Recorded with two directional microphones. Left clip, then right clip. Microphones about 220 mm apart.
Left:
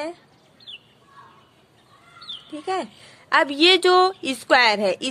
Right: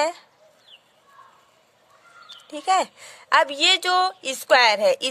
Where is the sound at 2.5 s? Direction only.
40° right (ahead or behind).